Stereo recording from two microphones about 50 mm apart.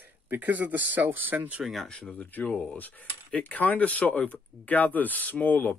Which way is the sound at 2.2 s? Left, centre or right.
Left.